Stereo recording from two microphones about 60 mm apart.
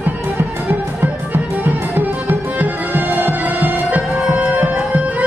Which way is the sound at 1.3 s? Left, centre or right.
Right.